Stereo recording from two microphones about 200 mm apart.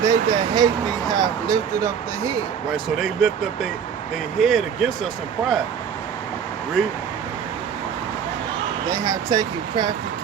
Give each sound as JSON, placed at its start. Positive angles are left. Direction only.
{"t": 0.0, "sound": "speech", "side_deg": -20}
{"t": 2.7, "sound": "speech", "side_deg": 0}
{"t": 8.9, "sound": "speech", "side_deg": -20}